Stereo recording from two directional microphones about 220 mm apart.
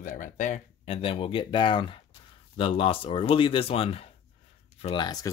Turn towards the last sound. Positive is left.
turn(degrees=20)  # may be behind; listen again after turning